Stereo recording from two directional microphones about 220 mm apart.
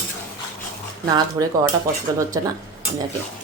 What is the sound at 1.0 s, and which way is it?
Speech, 15° right (ahead or behind).